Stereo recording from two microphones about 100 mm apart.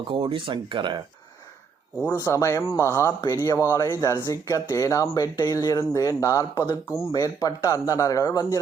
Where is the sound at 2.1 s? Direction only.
30° left (ahead or behind).